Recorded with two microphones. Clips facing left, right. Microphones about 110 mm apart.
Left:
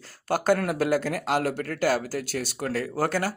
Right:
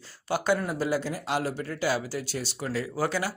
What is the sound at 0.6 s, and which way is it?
Speech, 65° left (ahead or behind).